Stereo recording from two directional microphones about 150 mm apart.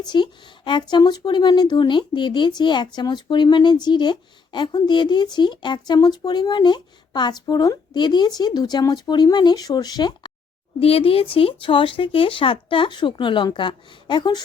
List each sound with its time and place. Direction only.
0.0 s a woman's voice: 30° left (ahead or behind)
10.8 s speech: 40° left (ahead or behind)